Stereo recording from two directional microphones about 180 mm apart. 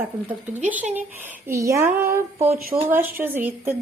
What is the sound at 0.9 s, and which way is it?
A woman's voice, 10° right (ahead or behind).